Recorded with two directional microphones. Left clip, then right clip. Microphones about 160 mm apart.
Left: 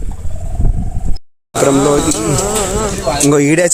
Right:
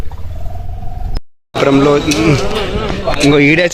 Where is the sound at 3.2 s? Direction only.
60° left (ahead or behind).